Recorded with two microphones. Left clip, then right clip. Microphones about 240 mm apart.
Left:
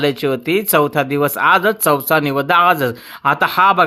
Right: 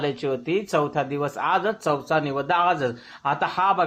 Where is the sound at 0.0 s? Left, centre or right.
Left.